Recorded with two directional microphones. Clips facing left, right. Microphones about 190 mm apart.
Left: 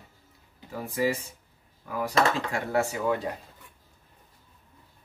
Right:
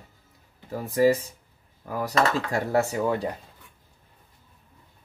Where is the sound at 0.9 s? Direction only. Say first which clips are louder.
Right 7 dB; 40° right (ahead or behind).